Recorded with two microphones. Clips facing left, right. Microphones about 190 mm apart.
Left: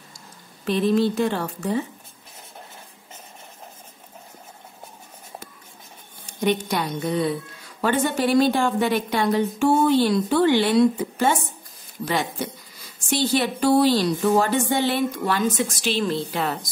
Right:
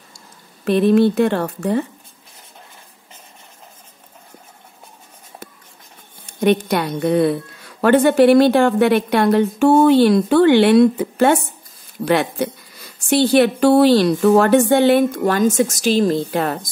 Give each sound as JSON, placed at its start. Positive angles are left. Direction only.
{"t": 0.7, "sound": "a woman's voice", "side_deg": -60}
{"t": 6.2, "sound": "a woman's voice", "side_deg": -60}